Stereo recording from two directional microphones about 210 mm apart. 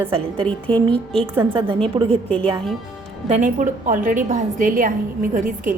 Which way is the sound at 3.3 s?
35° right (ahead or behind).